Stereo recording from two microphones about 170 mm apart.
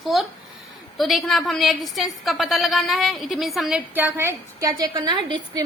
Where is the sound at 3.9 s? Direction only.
15° right (ahead or behind).